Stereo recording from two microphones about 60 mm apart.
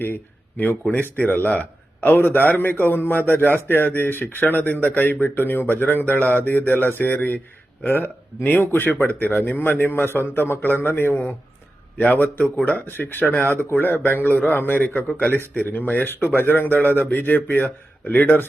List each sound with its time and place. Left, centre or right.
0.0 s a man's voice: left